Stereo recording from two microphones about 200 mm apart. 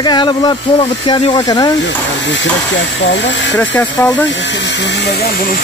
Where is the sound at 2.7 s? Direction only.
65° left (ahead or behind).